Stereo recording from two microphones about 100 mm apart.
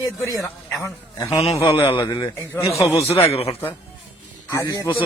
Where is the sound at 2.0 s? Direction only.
45° left (ahead or behind).